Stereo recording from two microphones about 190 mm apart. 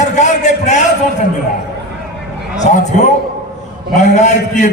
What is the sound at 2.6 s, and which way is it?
A man's voice, 40° left (ahead or behind).